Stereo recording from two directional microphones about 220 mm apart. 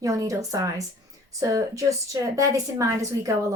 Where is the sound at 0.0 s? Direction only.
15° right (ahead or behind).